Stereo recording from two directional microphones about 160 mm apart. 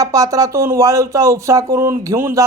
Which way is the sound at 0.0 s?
20° right (ahead or behind).